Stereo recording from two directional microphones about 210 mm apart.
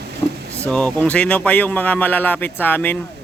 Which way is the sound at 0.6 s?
5° left (ahead or behind).